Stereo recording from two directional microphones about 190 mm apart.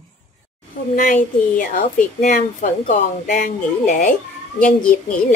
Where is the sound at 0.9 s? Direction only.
45° left (ahead or behind).